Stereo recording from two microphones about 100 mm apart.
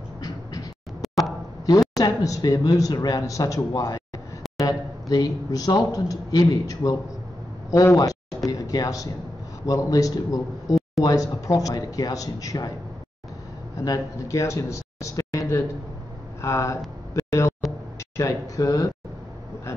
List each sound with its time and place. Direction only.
1.0 s a sound: centre (ahead or behind)
1.7 s speech: 35° left (ahead or behind)
5.1 s speech: 35° left (ahead or behind)
13.8 s a man's voice: 30° left (ahead or behind)
17.1 s a sound: 30° left (ahead or behind)
18.1 s speech: 30° left (ahead or behind)